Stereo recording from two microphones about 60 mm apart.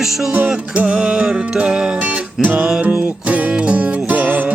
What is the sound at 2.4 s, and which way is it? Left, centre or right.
Music, right.